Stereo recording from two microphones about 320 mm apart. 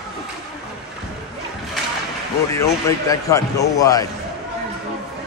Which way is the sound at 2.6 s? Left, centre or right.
Centre.